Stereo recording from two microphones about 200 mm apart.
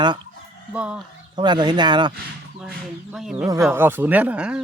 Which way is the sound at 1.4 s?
20° right (ahead or behind).